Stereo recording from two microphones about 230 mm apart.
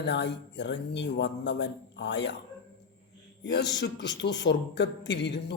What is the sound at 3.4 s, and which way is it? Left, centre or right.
A man's voice, left.